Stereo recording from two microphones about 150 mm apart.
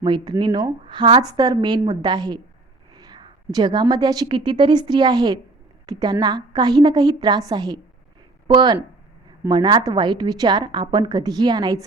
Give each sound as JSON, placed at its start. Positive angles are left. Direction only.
{"t": 0.0, "sound": "a woman's voice", "side_deg": -30}